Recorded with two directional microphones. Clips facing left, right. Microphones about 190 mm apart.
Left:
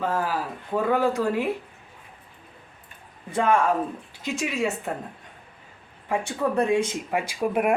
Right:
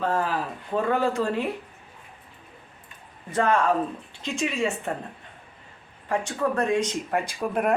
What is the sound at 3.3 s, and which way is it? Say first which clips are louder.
A woman's voice: even; 10° left (ahead or behind).